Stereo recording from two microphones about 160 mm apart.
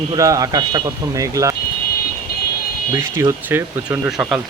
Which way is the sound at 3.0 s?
15° right (ahead or behind).